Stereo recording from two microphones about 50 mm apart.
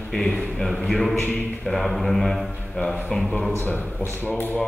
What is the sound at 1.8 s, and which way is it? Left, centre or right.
Speech, centre.